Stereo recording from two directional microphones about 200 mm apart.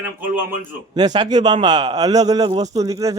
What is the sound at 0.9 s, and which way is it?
A man's voice, 20° right (ahead or behind).